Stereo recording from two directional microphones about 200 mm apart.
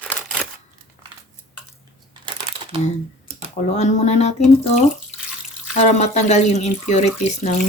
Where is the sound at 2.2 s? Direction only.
25° right (ahead or behind).